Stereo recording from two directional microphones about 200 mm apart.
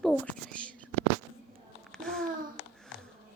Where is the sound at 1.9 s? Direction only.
5° left (ahead or behind).